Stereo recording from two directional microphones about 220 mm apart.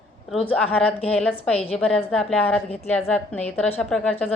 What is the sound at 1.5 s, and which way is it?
Speech, 25° left (ahead or behind).